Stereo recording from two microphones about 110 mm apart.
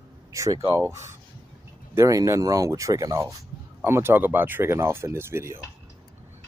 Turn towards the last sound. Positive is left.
turn(degrees=-25)  # may be behind; listen again after turning